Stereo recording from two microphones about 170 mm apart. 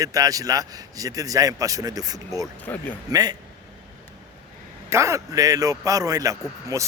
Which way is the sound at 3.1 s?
20° right (ahead or behind).